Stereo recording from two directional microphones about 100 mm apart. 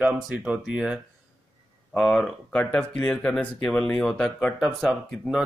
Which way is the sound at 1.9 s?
5° left (ahead or behind).